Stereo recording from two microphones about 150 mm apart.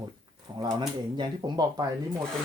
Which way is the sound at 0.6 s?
25° right (ahead or behind).